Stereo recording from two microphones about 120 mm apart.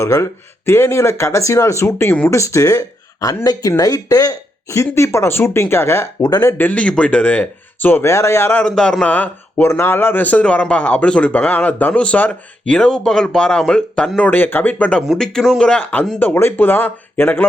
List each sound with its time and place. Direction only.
0.0 s speech: 25° left (ahead or behind)
8.6 s a man's voice: 10° left (ahead or behind)